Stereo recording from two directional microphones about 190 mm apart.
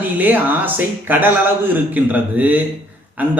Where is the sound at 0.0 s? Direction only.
10° right (ahead or behind).